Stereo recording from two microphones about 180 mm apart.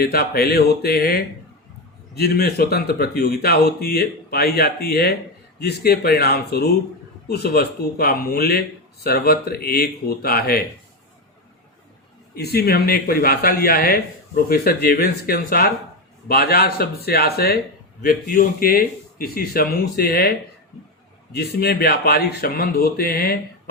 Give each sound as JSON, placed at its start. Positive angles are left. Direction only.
{"t": 0.0, "sound": "speech", "side_deg": 55}
{"t": 12.3, "sound": "speech", "side_deg": 60}
{"t": 21.3, "sound": "speech", "side_deg": 60}